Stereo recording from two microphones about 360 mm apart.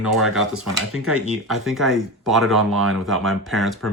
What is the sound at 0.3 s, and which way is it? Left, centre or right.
Speech, centre.